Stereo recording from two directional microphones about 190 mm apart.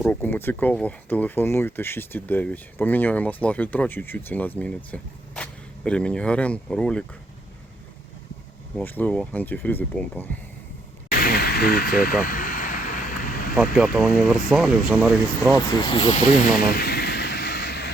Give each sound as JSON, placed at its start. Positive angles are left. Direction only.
{"t": 0.0, "sound": "speech", "side_deg": 10}
{"t": 8.7, "sound": "speech", "side_deg": 10}
{"t": 11.1, "sound": "vehicle", "side_deg": 55}
{"t": 13.6, "sound": "speech", "side_deg": -5}
{"t": 15.9, "sound": "speech", "side_deg": 25}
{"t": 16.6, "sound": "a sound", "side_deg": 50}